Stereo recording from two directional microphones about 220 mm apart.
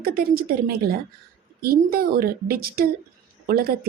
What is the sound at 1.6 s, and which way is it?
A child's voice, 45° right (ahead or behind).